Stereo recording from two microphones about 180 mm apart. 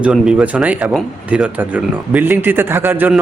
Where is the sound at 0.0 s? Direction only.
5° right (ahead or behind).